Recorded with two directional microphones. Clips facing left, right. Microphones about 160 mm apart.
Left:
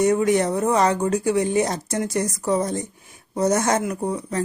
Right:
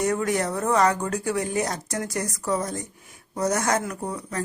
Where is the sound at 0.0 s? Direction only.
20° left (ahead or behind).